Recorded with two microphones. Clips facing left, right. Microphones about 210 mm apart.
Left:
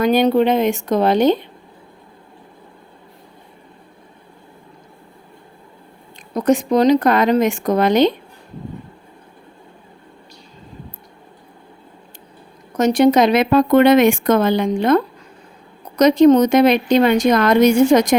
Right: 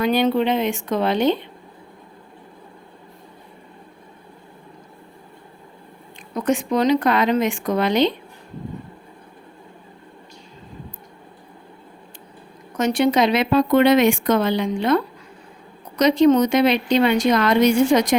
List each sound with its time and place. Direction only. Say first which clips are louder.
0.0 s speech: left 4 dB; 45° left (ahead or behind)
6.3 s speech: left 5 dB; 40° left (ahead or behind)
12.7 s speech: left 5 dB; 40° left (ahead or behind)